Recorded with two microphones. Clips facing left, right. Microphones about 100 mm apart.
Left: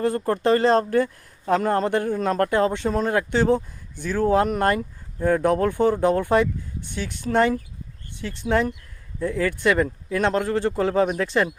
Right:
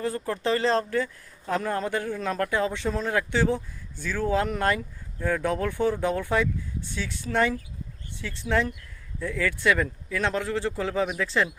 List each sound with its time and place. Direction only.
0.0 s speech: 50° left (ahead or behind)
8.2 s speech: 55° left (ahead or behind)
9.7 s speech: 35° left (ahead or behind)
10.2 s speech: 50° left (ahead or behind)